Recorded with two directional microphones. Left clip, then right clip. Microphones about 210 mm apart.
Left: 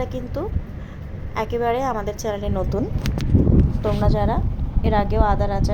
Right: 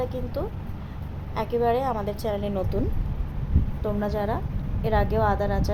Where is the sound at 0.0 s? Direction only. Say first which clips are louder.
Left 2 dB; 10° left (ahead or behind).